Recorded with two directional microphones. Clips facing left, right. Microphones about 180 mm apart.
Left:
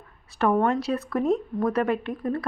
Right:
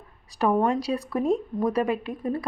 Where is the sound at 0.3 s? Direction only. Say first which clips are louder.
Even; 15° right (ahead or behind).